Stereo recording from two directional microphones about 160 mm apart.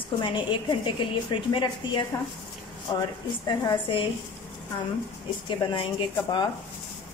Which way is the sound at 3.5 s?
30° left (ahead or behind).